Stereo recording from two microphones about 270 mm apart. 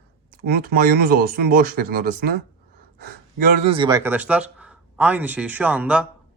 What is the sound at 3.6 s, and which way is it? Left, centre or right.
Speech, centre.